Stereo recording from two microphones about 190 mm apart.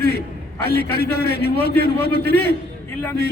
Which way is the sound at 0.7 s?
55° left (ahead or behind).